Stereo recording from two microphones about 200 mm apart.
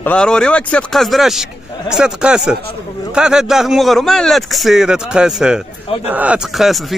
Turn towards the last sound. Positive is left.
turn(degrees=0)  # may be behind; listen again after turning